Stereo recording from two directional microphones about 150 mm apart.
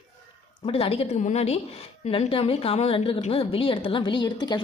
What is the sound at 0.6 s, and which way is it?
A woman's voice, 40° left (ahead or behind).